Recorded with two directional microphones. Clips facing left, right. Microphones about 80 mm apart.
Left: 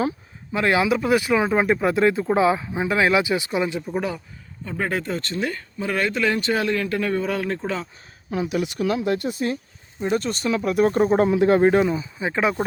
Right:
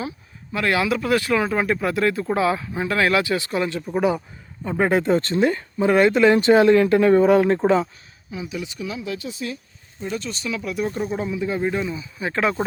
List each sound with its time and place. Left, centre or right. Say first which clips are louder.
0.5 s speech: left 1 dB; left
3.8 s speech: right 5 dB; centre
4.8 s speech: right 7 dB; right
8.3 s speech: left 6 dB; left
11.2 s speech: left 8 dB; left
12.2 s speech: right 1 dB; centre